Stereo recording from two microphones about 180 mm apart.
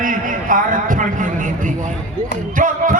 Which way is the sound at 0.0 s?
45° right (ahead or behind).